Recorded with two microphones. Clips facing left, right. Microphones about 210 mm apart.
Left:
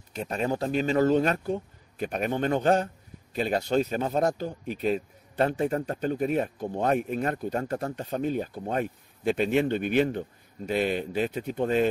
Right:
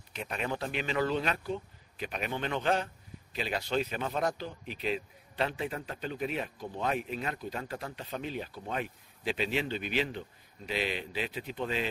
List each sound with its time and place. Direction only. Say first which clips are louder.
0.1 s speech: left 7 dB; 40° left (ahead or behind)